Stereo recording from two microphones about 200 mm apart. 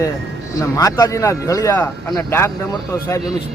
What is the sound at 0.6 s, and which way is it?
Speech, 15° left (ahead or behind).